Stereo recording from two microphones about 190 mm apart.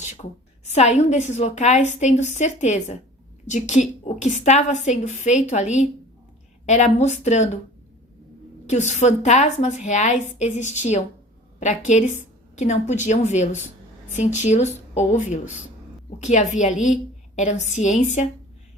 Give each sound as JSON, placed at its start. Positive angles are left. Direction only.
{"t": 0.2, "sound": "a woman's voice", "side_deg": 35}
{"t": 8.6, "sound": "a woman's voice", "side_deg": 40}